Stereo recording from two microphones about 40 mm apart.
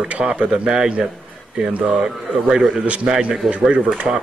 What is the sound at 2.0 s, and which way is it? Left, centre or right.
A man's voice, centre.